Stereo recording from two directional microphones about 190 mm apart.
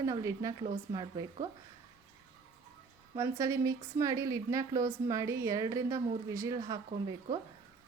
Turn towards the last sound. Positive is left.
turn(degrees=-20)  # may be behind; listen again after turning